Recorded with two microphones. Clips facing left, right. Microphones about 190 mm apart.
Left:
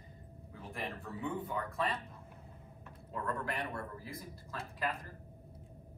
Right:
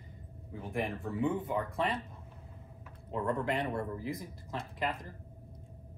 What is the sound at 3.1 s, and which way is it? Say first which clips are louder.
Speech: right 6 dB; 20° right (ahead or behind).